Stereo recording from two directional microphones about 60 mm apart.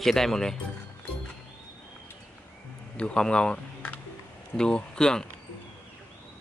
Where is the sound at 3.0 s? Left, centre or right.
Centre.